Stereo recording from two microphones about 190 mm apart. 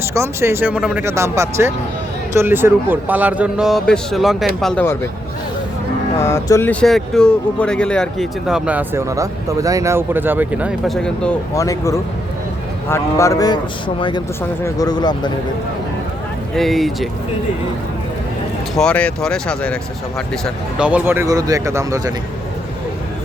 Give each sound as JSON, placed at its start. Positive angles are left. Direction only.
{"t": 0.0, "sound": "speech", "side_deg": -15}
{"t": 6.1, "sound": "speech", "side_deg": 15}
{"t": 11.5, "sound": "a man's voice", "side_deg": 15}
{"t": 16.6, "sound": "speech", "side_deg": 0}
{"t": 18.7, "sound": "speech", "side_deg": 5}